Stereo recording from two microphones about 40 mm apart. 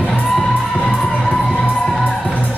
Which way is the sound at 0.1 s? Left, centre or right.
Centre.